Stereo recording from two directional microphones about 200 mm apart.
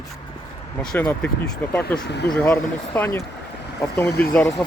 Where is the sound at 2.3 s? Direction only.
5° left (ahead or behind).